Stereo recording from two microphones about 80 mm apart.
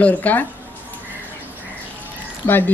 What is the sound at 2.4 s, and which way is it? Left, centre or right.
Speech, left.